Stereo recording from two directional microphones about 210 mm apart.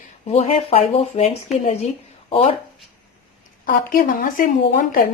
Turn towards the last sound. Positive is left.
turn(degrees=40)  # may be behind; listen again after turning